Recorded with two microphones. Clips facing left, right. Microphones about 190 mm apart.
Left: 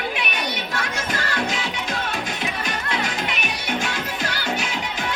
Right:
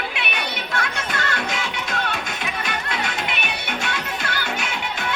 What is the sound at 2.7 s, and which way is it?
Music, 40° left (ahead or behind).